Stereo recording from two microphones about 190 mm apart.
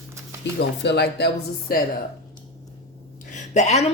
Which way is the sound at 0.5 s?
60° left (ahead or behind).